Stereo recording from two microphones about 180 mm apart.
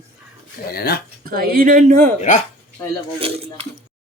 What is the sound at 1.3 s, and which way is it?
Speech, 55° right (ahead or behind).